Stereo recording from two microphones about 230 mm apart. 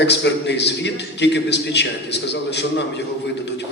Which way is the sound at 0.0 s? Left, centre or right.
Left.